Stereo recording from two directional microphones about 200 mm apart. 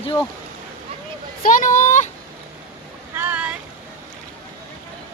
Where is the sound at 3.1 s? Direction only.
10° right (ahead or behind).